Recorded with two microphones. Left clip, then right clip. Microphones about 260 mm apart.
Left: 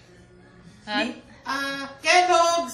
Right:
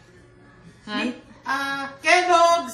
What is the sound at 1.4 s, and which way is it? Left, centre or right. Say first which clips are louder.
Speech: right 3 dB; centre.